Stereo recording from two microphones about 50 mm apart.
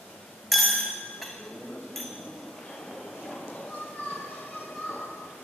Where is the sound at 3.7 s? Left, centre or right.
Left.